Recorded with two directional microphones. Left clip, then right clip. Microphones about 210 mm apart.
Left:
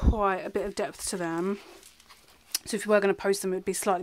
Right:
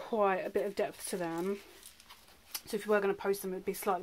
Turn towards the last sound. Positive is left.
turn(degrees=45)  # may be behind; listen again after turning